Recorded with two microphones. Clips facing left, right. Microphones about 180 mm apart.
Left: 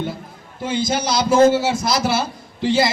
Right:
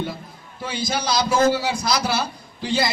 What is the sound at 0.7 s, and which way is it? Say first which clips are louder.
A man's voice: left 4 dB; 25° left (ahead or behind).